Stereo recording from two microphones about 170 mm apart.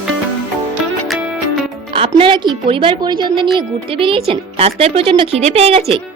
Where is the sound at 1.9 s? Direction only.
30° right (ahead or behind).